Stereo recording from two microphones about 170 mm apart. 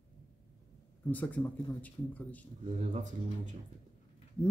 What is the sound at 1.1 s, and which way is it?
A man's voice, 10° left (ahead or behind).